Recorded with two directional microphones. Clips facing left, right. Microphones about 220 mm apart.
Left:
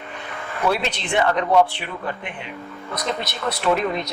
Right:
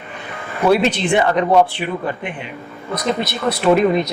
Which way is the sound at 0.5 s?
10° right (ahead or behind).